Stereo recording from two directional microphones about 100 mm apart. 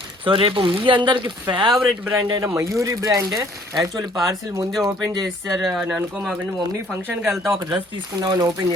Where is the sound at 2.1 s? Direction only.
30° right (ahead or behind).